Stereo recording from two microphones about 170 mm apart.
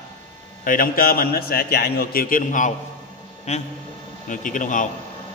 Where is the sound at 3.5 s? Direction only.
40° left (ahead or behind).